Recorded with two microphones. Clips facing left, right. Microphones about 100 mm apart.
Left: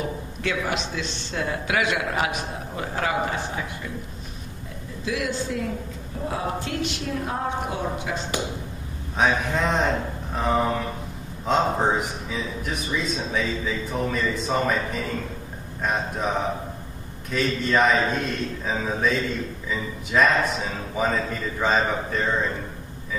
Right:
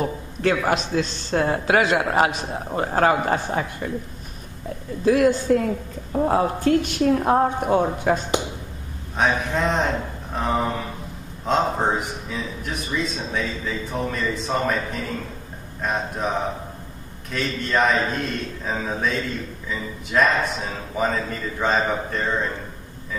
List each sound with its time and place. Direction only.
0.0 s a man's voice: 40° right (ahead or behind)
5.0 s a man's voice: 45° right (ahead or behind)
9.1 s speech: centre (ahead or behind)